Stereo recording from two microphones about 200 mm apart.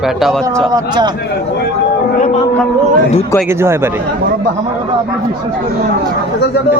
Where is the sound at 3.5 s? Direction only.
10° right (ahead or behind).